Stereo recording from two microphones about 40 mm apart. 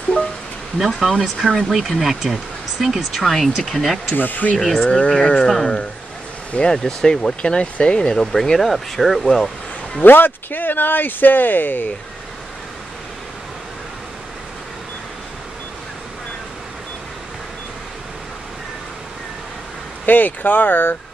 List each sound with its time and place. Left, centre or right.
0.7 s speech: centre
4.1 s speech: left
4.6 s speech: centre
4.8 s speech: left
6.7 s speech: centre
10.0 s speech: left
20.1 s speech: left